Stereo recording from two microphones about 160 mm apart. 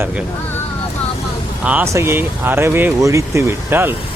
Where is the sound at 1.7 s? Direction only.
15° right (ahead or behind).